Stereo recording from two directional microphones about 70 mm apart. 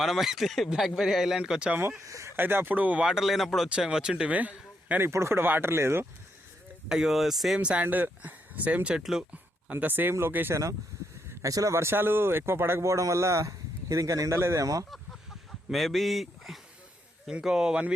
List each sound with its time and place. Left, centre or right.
0.0 s speech: centre
2.0 s speech: right
2.3 s speech: right; by 4.4 s centre
4.9 s speech: right
6.8 s speech: centre
7.6 s speech: centre
9.0 s speech: centre
9.8 s speech: right
10.5 s speech: right
14.3 s speech: right
14.8 s chicken: centre
15.7 s speech: centre